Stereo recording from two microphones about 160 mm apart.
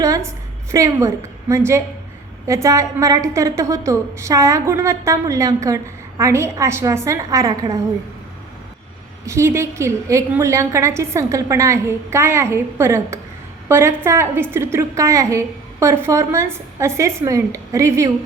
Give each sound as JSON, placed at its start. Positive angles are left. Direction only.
{"t": 0.0, "sound": "a woman's voice", "side_deg": -20}
{"t": 9.2, "sound": "a woman's voice", "side_deg": -20}